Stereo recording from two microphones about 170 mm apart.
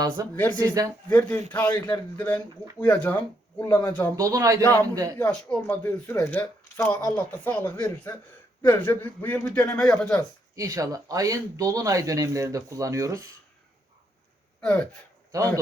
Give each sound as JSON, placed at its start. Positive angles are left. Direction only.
{"t": 0.2, "sound": "speech", "side_deg": -20}
{"t": 1.1, "sound": "speech", "side_deg": 10}
{"t": 4.1, "sound": "speech", "side_deg": -20}
{"t": 4.6, "sound": "speech", "side_deg": 10}
{"t": 10.5, "sound": "speech", "side_deg": -20}
{"t": 14.6, "sound": "speech", "side_deg": 10}